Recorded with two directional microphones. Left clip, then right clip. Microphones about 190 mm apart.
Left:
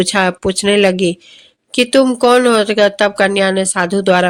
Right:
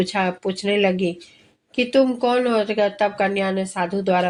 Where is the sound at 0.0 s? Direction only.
35° left (ahead or behind).